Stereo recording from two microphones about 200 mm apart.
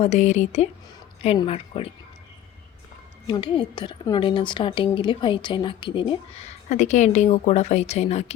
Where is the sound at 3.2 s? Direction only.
25° left (ahead or behind).